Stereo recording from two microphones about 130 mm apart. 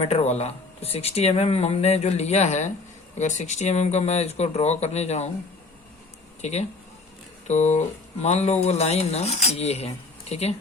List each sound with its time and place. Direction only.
0.0 s speech: 50° left (ahead or behind)
6.4 s speech: 55° left (ahead or behind)